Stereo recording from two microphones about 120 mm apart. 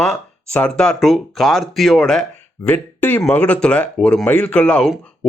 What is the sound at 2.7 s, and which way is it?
Speech, 15° left (ahead or behind).